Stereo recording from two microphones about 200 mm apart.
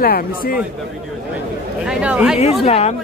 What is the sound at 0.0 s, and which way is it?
Speech, 50° left (ahead or behind).